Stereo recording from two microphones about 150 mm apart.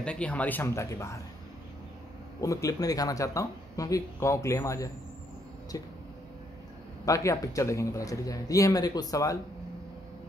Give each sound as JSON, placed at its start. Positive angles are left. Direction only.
{"t": 0.0, "sound": "speech", "side_deg": 5}
{"t": 2.4, "sound": "speech", "side_deg": 20}
{"t": 7.1, "sound": "speech", "side_deg": 20}